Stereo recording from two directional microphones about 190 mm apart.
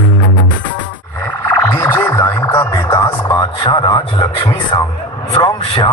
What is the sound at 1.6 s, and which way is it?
Radio, 15° left (ahead or behind).